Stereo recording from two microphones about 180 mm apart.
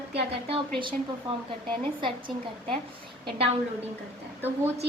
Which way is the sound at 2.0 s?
30° right (ahead or behind).